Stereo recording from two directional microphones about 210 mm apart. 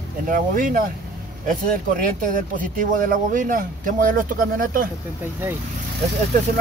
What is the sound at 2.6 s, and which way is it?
Speech, 40° right (ahead or behind).